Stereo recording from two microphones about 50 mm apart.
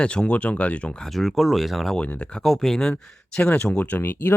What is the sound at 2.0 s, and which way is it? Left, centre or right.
Speech, left.